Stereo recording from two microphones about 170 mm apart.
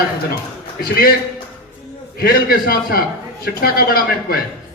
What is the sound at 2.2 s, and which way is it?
A man's voice, 60° left (ahead or behind).